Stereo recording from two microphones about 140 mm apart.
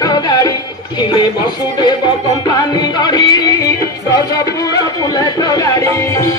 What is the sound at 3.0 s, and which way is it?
Music, 30° left (ahead or behind).